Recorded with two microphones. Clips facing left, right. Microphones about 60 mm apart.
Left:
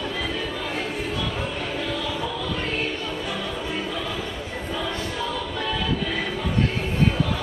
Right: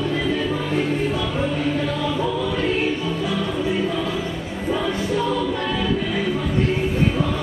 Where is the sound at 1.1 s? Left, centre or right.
Centre.